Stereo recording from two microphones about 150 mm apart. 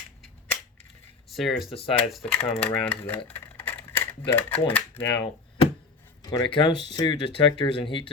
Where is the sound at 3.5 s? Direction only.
10° left (ahead or behind).